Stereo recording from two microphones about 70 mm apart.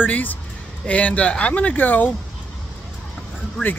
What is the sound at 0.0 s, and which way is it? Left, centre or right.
Speech, left.